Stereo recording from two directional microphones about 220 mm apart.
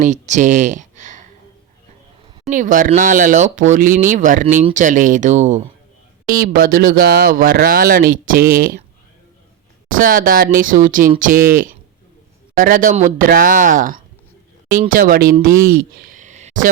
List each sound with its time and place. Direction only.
0.0 s a sound: 35° right (ahead or behind)
2.5 s speech: 35° right (ahead or behind)
9.9 s speech: 40° right (ahead or behind)